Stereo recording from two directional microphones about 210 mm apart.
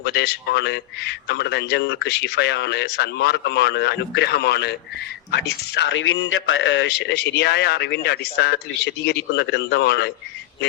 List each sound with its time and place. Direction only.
0.0 s a man's voice: 50° left (ahead or behind)